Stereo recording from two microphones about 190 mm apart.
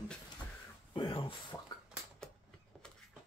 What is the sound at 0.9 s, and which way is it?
Speech, 25° left (ahead or behind).